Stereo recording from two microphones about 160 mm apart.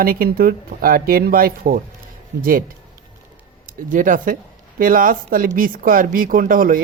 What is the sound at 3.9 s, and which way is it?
Speech, 55° right (ahead or behind).